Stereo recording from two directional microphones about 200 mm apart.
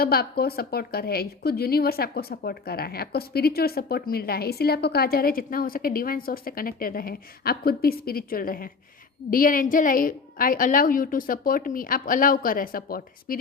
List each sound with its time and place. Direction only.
0.0 s a woman's voice: 50° left (ahead or behind)